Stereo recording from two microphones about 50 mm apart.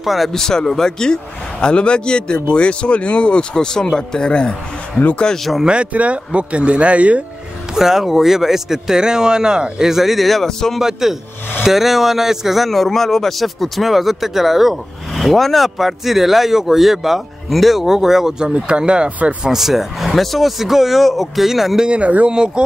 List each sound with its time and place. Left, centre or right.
0.0 s speech: centre
0.3 s a man's voice: centre
5.7 s speech: right
7.7 s speech: centre
10.8 s speech: centre
18.5 s speech: centre
19.0 s speech: right
19.4 s speech: centre
21.8 s speech: right